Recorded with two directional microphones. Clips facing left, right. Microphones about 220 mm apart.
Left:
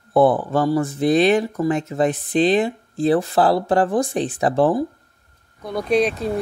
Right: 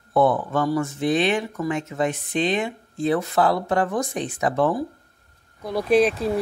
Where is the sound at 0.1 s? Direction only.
30° left (ahead or behind).